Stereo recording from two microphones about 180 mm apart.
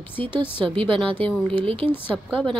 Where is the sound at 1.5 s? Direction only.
30° right (ahead or behind).